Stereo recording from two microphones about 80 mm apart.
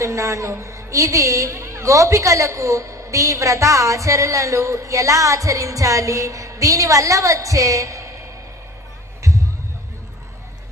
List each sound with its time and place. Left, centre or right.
0.0 s a woman's voice: right
9.2 s music: right